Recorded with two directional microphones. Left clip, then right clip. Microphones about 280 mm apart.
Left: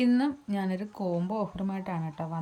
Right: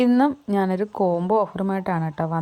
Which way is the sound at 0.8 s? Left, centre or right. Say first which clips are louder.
Right 11 dB; right.